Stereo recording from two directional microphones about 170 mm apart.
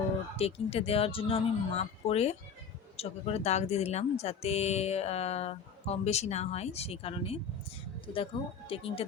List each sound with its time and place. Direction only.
0.3 s speech: 35° left (ahead or behind)